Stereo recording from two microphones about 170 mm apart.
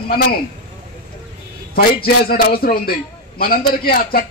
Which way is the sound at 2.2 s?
60° left (ahead or behind).